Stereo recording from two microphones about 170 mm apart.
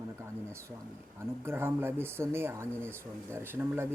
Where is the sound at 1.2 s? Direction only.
15° right (ahead or behind).